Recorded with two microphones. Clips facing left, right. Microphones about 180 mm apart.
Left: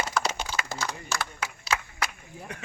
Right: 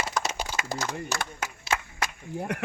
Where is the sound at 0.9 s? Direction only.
50° right (ahead or behind).